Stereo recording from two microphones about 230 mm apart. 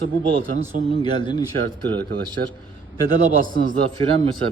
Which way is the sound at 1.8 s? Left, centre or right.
Centre.